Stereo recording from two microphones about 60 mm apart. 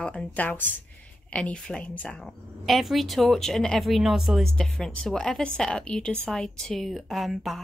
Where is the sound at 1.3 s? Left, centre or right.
Centre.